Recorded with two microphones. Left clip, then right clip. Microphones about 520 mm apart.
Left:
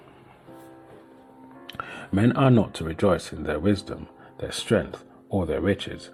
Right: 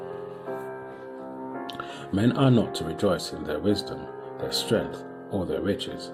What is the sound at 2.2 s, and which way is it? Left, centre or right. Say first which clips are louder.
Speech: left 2 dB; left.